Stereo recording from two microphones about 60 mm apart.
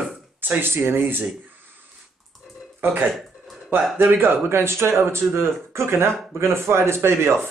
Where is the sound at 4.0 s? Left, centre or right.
Right.